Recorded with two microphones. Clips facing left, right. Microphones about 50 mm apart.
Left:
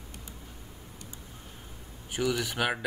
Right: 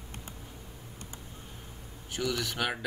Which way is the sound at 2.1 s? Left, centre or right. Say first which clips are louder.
Left 3 dB; centre.